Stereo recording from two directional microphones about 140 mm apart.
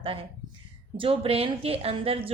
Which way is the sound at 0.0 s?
40° right (ahead or behind).